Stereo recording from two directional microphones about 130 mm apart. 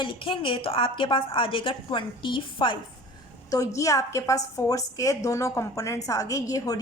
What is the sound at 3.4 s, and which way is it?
A woman's voice, 25° left (ahead or behind).